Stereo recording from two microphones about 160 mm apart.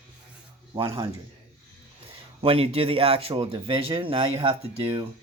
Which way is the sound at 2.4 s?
35° right (ahead or behind).